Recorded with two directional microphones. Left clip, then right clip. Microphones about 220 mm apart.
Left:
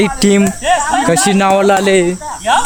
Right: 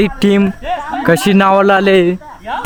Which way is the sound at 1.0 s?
25° right (ahead or behind).